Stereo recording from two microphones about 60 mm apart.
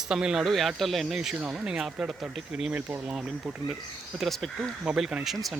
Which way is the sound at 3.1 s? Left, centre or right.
Centre.